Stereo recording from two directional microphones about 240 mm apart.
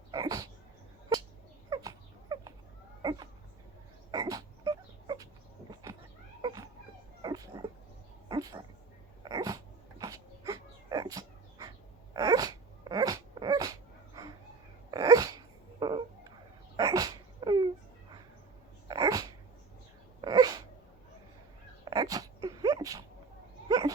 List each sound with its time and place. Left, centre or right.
0.1 s dog: centre
1.7 s dog: centre
3.0 s a sound: centre
5.8 s cat: centre
6.4 s a sound: centre
9.2 s dog: centre
14.8 s sneeze: centre
15.8 s music: centre
16.7 s sneeze: centre
18.9 s dog: centre
21.8 s a sound: centre
23.6 s goat: centre